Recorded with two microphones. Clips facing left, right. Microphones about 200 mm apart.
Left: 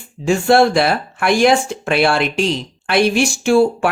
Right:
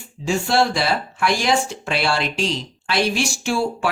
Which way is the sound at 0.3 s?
55° left (ahead or behind).